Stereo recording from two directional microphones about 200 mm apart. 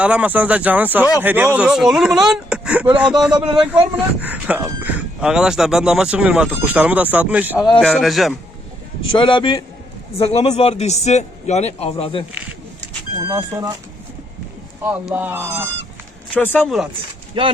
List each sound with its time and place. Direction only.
0.0 s speech: 5° right (ahead or behind)
3.3 s a man's voice: 20° right (ahead or behind)
4.2 s speech: 5° right (ahead or behind)
9.1 s a man's voice: 25° left (ahead or behind)
13.1 s speech: 15° right (ahead or behind)
14.8 s speech: 10° right (ahead or behind)
16.3 s speech: 10° left (ahead or behind)
17.4 s a man's voice: 25° right (ahead or behind)